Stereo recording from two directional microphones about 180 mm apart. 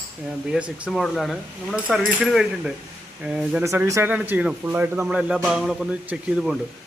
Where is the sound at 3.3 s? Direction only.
5° right (ahead or behind).